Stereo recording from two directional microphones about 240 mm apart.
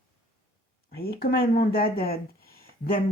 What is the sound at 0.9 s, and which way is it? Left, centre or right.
Speech, left.